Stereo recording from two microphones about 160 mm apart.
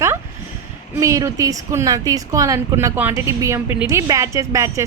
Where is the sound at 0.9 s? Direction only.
20° right (ahead or behind).